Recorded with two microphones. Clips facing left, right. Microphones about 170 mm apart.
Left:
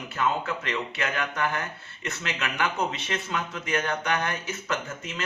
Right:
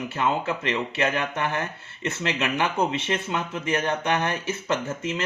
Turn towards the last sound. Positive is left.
turn(degrees=-30)  # may be behind; listen again after turning